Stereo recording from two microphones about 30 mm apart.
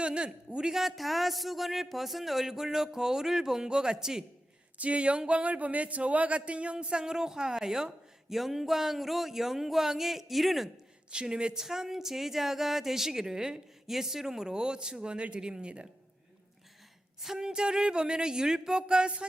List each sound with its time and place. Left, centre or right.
0.0 s a man's voice: right
0.6 s speech: centre
0.9 s speech: centre; by 4.2 s right
4.8 s speech: right
6.9 s speech: right; by 10.7 s centre
11.1 s speech: right
11.6 s speech: centre
13.8 s speech: centre
14.5 s speech: right
17.3 s speech: right